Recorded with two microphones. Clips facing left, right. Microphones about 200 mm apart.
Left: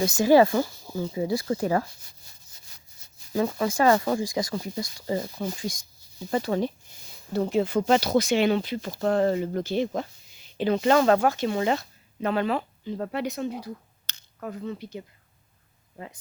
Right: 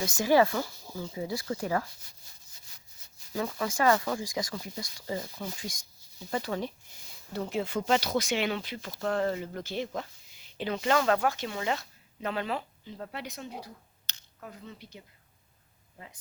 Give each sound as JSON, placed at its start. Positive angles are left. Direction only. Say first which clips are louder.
{"t": 0.0, "sound": "speech", "louder": "left 6 dB", "side_deg": 30}
{"t": 3.3, "sound": "speech", "louder": "left 7 dB", "side_deg": 30}
{"t": 12.2, "sound": "speech", "louder": "left 7 dB", "side_deg": 55}